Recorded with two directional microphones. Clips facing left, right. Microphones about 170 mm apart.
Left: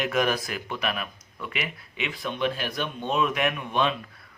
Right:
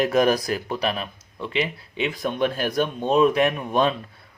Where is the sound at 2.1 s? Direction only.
45° right (ahead or behind).